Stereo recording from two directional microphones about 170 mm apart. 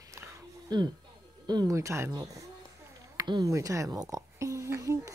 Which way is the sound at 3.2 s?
20° right (ahead or behind).